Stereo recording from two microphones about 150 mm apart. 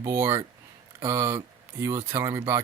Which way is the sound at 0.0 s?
20° right (ahead or behind).